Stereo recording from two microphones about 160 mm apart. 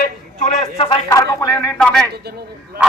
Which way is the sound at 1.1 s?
20° left (ahead or behind).